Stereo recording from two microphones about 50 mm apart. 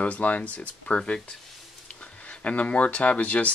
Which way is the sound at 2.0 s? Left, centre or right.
Left.